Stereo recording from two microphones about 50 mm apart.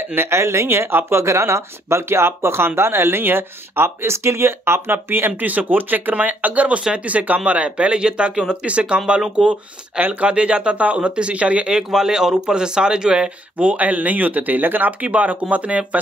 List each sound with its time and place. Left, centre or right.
0.1 s speech: right
5.4 s speech: right